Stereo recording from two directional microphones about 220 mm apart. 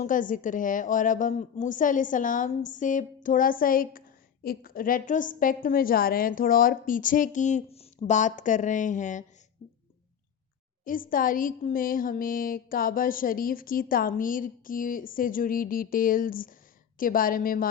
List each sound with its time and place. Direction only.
0.0 s a woman's voice: 35° left (ahead or behind)
10.8 s a woman's voice: 40° left (ahead or behind)